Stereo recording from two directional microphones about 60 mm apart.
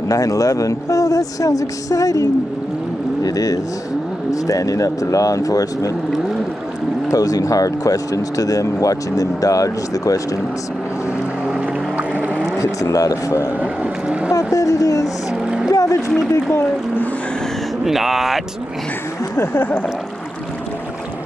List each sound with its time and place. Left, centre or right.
0.1 s a woman's voice: left
3.3 s a woman's voice: left
7.1 s a woman's voice: left
11.4 s boat: centre
12.9 s speech: left
13.6 s boat: right
14.5 s a woman's voice: left
15.4 s a sound: centre
15.7 s a sound: left
17.8 s speech: centre
19.3 s a sound: left